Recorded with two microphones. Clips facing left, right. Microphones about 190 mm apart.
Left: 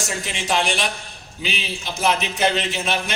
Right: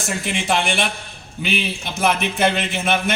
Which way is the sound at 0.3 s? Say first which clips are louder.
Right 2 dB; 55° right (ahead or behind).